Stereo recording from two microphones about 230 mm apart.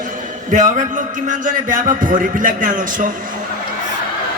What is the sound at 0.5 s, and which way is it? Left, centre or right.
A man's voice, right.